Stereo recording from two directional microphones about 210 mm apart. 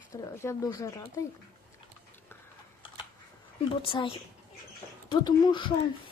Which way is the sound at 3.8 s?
25° left (ahead or behind).